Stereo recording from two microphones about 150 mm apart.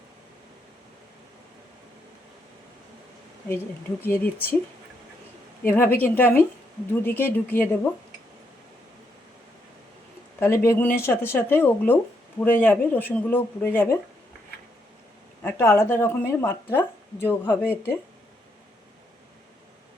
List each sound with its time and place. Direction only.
4.0 s speech: 15° left (ahead or behind)
5.6 s speech: 15° left (ahead or behind)
10.4 s speech: 15° left (ahead or behind)
15.4 s speech: 15° left (ahead or behind)